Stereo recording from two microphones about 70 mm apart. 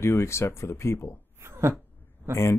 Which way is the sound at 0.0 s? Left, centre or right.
Left.